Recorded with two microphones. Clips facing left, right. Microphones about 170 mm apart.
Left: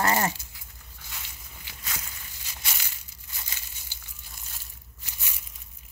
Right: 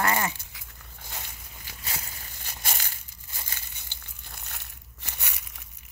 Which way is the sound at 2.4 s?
50° right (ahead or behind).